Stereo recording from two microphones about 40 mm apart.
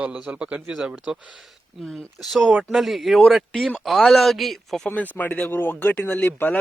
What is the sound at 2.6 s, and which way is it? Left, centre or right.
Speech, centre.